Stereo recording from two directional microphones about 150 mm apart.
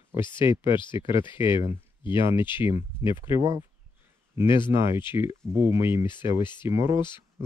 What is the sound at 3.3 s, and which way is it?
Speech, 20° right (ahead or behind).